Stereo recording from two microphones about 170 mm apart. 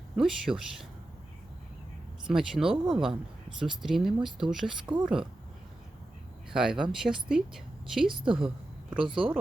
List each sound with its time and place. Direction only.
0.2 s speech: centre (ahead or behind)
2.2 s speech: centre (ahead or behind)
6.5 s speech: 5° right (ahead or behind)
8.2 s a woman's voice: 30° right (ahead or behind)
8.4 s a sound: 5° right (ahead or behind)
9.0 s a woman's voice: 30° right (ahead or behind)